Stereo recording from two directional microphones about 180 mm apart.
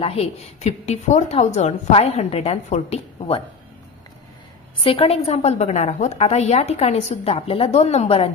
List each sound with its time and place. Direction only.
0.0 s a woman's voice: 35° left (ahead or behind)
4.8 s a woman's voice: 30° left (ahead or behind)